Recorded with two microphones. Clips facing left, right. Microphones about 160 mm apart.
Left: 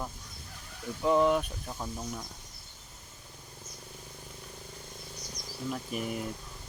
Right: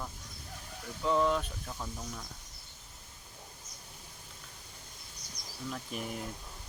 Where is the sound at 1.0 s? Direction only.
20° left (ahead or behind).